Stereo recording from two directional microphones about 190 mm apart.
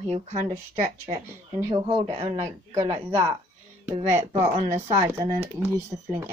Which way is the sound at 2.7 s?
15° right (ahead or behind).